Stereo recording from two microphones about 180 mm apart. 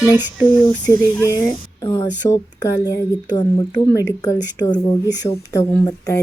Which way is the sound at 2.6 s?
20° left (ahead or behind).